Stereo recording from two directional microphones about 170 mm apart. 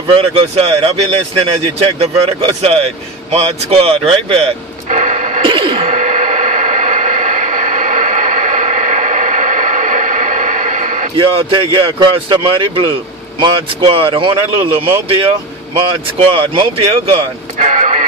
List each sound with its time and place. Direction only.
0.0 s speech: 30° right (ahead or behind)
4.8 s a sound: 45° right (ahead or behind)
5.4 s a sound: 30° right (ahead or behind)
5.8 s radio: 45° right (ahead or behind)
11.1 s a man's voice: 30° right (ahead or behind)
17.6 s vehicle: 45° right (ahead or behind)